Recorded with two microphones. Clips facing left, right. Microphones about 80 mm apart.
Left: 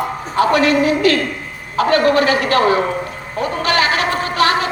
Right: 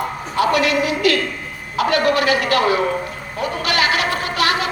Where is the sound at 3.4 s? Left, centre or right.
Left.